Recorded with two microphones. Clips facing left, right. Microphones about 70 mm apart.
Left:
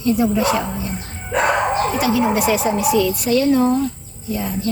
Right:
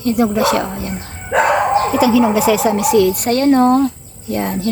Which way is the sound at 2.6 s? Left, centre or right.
Right.